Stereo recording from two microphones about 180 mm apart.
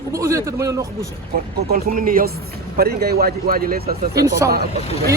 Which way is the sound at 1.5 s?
55° right (ahead or behind).